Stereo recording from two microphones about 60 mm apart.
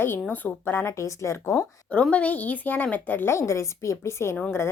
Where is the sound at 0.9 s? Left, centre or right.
Left.